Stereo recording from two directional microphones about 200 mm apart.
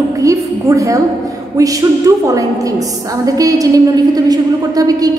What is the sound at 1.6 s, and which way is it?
A woman's voice, 15° right (ahead or behind).